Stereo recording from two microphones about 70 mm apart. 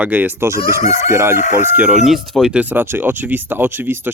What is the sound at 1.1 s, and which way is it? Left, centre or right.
Speech, right.